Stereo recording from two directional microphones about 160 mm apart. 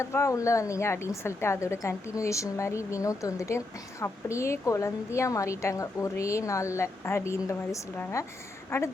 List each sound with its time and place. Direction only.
0.0 s a woman's voice: 15° left (ahead or behind)